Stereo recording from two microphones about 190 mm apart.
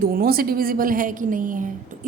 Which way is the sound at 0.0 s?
50° right (ahead or behind).